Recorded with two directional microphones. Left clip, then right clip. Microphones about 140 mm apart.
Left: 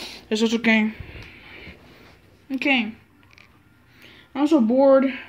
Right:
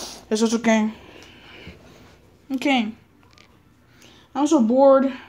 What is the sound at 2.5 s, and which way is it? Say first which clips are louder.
Speech: even; 20° right (ahead or behind).